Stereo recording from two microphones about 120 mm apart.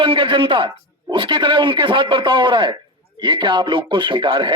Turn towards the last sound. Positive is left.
turn(degrees=-40)  # may be behind; listen again after turning